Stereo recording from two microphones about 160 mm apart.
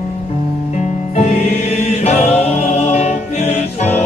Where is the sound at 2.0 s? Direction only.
45° left (ahead or behind).